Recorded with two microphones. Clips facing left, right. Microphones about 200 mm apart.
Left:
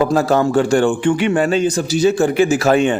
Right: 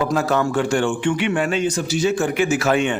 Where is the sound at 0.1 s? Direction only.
35° left (ahead or behind).